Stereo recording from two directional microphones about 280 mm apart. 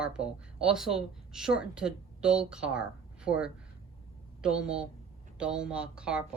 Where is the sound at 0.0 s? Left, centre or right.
Centre.